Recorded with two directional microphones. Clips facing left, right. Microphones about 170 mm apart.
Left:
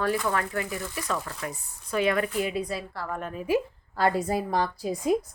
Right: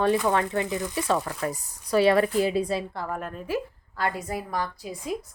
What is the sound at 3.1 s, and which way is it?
Speech, centre (ahead or behind).